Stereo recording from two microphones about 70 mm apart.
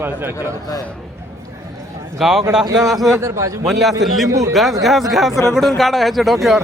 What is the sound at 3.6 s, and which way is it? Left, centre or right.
Speech, centre.